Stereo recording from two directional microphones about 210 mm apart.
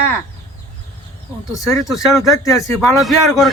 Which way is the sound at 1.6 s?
15° left (ahead or behind).